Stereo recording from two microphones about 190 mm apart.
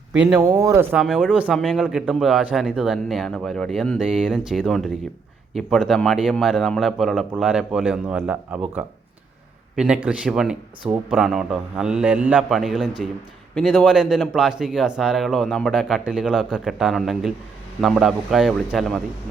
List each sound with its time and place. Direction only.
0.3 s speech: 15° right (ahead or behind)
1.0 s a man's voice: centre (ahead or behind)